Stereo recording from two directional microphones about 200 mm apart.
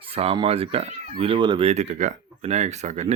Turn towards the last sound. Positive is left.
turn(degrees=-35)  # may be behind; listen again after turning